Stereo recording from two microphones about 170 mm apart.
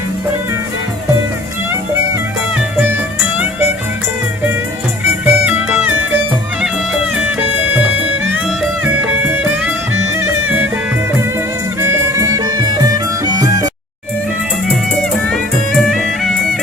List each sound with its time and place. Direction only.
3.3 s music: 10° right (ahead or behind)
5.2 s music: 10° right (ahead or behind)
8.8 s music: 5° right (ahead or behind)
11.8 s music: 15° right (ahead or behind)
15.3 s music: 5° left (ahead or behind)